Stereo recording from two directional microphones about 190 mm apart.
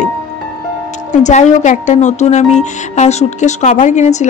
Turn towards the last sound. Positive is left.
turn(degrees=40)  # may be behind; listen again after turning